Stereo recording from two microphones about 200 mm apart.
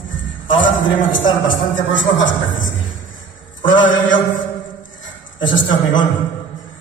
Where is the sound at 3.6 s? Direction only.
70° left (ahead or behind).